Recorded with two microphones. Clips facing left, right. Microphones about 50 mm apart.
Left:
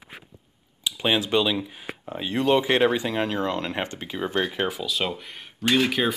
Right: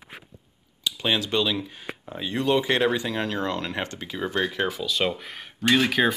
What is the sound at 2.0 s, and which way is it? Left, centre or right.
Speech, left.